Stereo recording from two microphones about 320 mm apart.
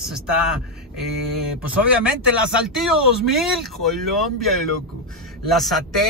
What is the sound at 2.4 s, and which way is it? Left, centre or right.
Speech, centre.